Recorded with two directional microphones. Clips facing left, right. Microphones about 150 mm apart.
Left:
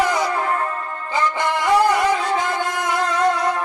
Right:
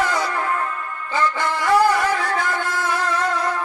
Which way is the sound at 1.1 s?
20° left (ahead or behind).